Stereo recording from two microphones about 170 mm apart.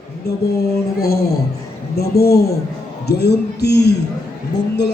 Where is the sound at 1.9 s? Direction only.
65° left (ahead or behind).